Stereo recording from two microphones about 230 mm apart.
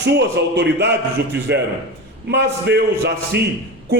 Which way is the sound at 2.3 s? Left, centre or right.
Right.